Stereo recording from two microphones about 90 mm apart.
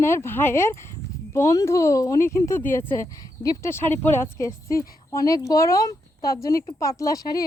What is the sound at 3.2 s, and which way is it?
Speech, 40° left (ahead or behind).